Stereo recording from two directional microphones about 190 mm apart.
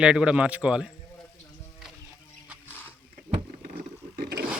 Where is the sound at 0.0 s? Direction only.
5° right (ahead or behind).